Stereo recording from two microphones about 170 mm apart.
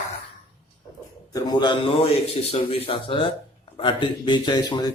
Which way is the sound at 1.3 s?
25° left (ahead or behind).